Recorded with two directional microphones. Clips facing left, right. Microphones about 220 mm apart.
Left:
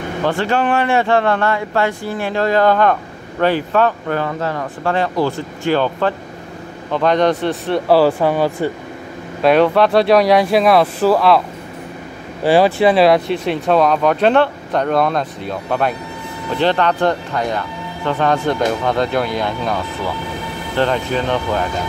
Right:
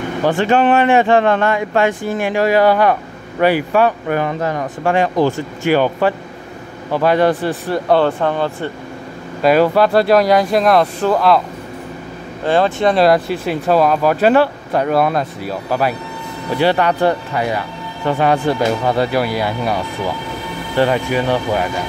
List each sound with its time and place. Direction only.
0.2 s speech: 15° right (ahead or behind); by 8.7 s 10° left (ahead or behind)
9.4 s speech: centre (ahead or behind)
12.4 s speech: 10° left (ahead or behind); by 21.6 s 10° right (ahead or behind)